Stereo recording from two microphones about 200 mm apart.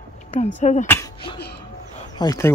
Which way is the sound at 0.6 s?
35° left (ahead or behind).